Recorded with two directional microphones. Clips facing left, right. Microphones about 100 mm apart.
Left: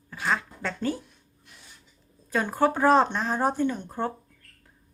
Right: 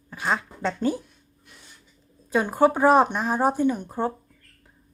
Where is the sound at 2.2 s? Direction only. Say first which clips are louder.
Right 4 dB; 15° right (ahead or behind).